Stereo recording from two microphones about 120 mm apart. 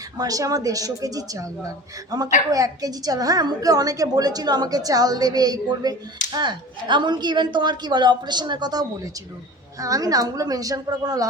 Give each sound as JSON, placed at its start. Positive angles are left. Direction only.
{"t": 0.2, "sound": "a man's voice", "side_deg": -30}